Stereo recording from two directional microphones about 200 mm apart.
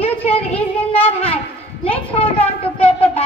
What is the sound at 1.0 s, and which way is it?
Speech, 30° left (ahead or behind).